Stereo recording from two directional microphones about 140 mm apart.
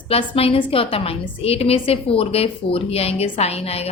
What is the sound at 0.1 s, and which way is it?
A woman's voice, 45° left (ahead or behind).